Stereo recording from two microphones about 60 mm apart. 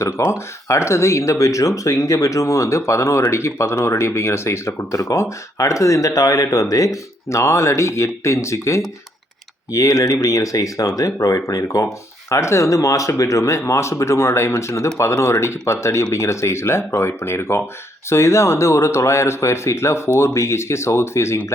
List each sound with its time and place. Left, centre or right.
0.0 s speech: left
9.7 s speech: left